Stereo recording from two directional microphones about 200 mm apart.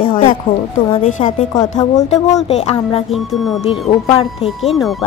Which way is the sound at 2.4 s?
30° left (ahead or behind).